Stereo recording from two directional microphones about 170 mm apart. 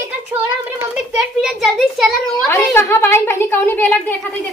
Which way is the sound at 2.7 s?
15° left (ahead or behind).